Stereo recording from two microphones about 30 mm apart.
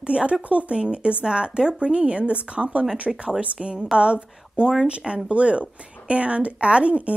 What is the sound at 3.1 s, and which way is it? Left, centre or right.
Speech, centre.